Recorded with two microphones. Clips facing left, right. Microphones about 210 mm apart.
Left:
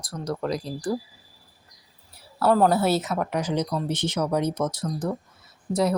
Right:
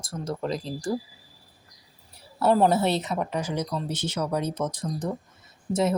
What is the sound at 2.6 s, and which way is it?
Speech, centre (ahead or behind).